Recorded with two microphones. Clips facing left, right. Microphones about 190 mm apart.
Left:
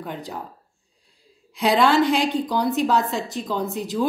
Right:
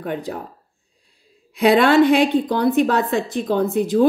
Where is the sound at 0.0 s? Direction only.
60° right (ahead or behind).